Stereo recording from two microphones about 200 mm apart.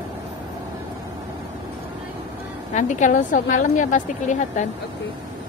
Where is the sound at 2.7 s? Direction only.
40° left (ahead or behind).